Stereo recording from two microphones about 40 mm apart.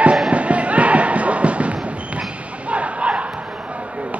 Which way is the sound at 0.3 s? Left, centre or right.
Right.